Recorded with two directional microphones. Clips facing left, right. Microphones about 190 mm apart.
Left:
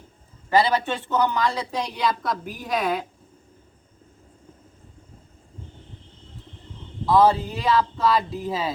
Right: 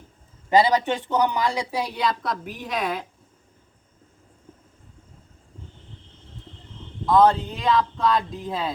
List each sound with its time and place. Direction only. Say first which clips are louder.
0.5 s a woman's voice: right 2 dB; 15° right (ahead or behind); by 3.1 s centre (ahead or behind)
7.0 s speech: even; 5° left (ahead or behind)